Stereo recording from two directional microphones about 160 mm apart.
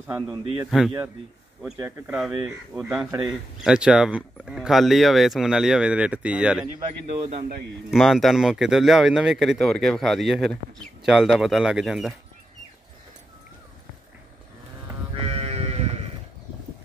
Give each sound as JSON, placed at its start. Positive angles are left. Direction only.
{"t": 0.0, "sound": "speech", "side_deg": -10}
{"t": 0.7, "sound": "speech", "side_deg": 0}
{"t": 1.8, "sound": "speech", "side_deg": -15}
{"t": 2.7, "sound": "speech", "side_deg": -5}
{"t": 7.2, "sound": "a man's voice", "side_deg": -40}
{"t": 7.9, "sound": "speech", "side_deg": 0}
{"t": 15.1, "sound": "sheep", "side_deg": -40}